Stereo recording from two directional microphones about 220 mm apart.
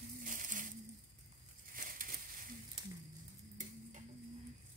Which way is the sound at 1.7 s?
40° right (ahead or behind).